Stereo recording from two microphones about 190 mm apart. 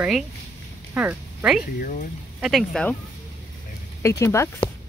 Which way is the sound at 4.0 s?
15° left (ahead or behind).